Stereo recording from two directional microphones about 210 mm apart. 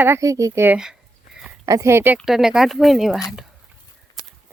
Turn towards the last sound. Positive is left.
turn(degrees=0)  # may be behind; listen again after turning